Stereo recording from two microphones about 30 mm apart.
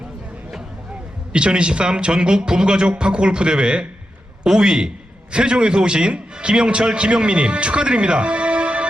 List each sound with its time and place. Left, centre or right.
1.3 s a man's voice: right